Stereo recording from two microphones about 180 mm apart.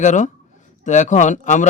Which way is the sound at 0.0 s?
45° left (ahead or behind).